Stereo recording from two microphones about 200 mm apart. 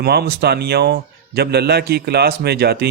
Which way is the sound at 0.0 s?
50° right (ahead or behind).